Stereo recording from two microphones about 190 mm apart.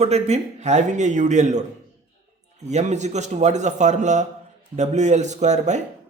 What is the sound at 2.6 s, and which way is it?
Speech, 35° right (ahead or behind).